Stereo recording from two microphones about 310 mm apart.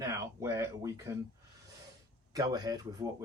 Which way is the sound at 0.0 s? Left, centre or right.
Centre.